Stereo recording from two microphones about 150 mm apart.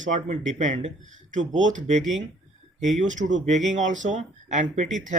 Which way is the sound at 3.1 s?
55° right (ahead or behind).